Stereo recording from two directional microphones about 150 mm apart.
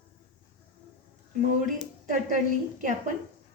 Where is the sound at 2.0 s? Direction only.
60° right (ahead or behind).